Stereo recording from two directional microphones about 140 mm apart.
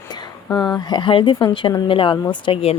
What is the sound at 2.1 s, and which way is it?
Speech, 25° left (ahead or behind).